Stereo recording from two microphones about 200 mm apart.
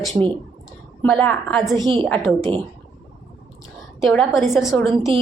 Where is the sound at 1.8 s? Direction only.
25° right (ahead or behind).